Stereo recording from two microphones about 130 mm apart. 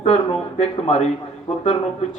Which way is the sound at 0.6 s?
55° left (ahead or behind).